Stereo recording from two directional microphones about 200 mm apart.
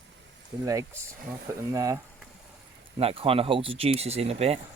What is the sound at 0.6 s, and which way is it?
Speech, 15° right (ahead or behind).